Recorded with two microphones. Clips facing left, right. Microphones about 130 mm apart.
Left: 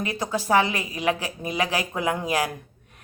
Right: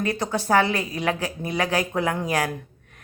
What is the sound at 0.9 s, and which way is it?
Speech, 35° right (ahead or behind).